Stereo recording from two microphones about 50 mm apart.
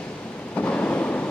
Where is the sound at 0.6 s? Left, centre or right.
Left.